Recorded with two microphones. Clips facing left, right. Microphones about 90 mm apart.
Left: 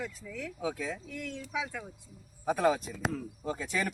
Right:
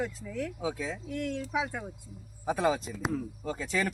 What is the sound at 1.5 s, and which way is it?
Speech, 45° right (ahead or behind).